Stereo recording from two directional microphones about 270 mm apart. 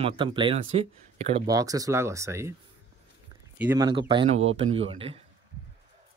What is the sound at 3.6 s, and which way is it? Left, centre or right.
Speech, centre.